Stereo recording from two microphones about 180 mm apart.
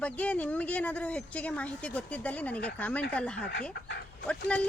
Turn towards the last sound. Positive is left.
turn(degrees=5)  # may be behind; listen again after turning